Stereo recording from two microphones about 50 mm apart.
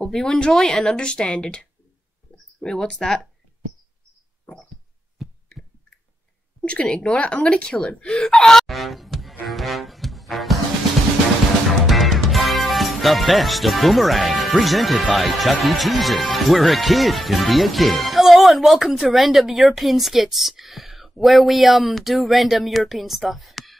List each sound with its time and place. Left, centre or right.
0.0 s a woman's voice: centre
5.2 s heart sounds: centre
6.6 s speech: left; by 9.3 s centre
9.5 s music: centre
11.8 s music: centre
15.1 s speech: centre